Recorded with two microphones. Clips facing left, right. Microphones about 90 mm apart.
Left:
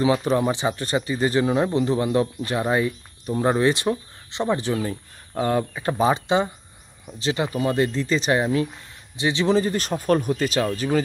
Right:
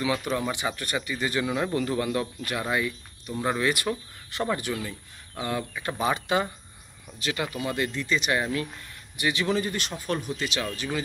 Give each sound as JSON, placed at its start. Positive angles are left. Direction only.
{"t": 0.0, "sound": "speech", "side_deg": 30}
{"t": 5.7, "sound": "speech", "side_deg": 30}